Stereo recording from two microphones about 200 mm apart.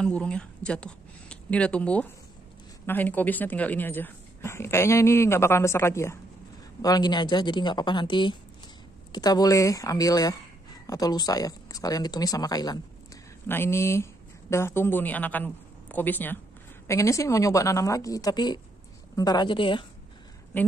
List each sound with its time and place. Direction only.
0.0 s a woman's voice: 5° left (ahead or behind); by 19.9 s 25° left (ahead or behind)
20.5 s speech: 10° left (ahead or behind)